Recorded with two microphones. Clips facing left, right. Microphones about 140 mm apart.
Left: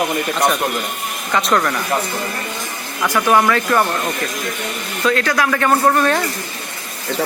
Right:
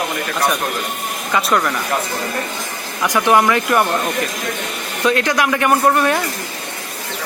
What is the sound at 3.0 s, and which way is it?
Speech, 15° right (ahead or behind).